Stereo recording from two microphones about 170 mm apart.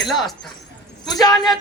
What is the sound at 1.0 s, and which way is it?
Speech, 25° left (ahead or behind).